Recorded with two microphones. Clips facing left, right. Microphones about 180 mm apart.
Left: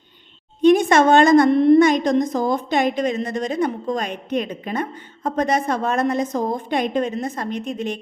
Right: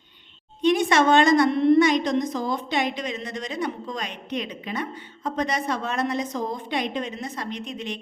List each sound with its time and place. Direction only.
0.6 s a woman's voice: 50° left (ahead or behind)